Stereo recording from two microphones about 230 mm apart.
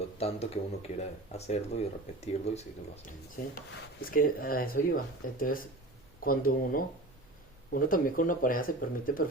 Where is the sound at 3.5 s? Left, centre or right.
Left.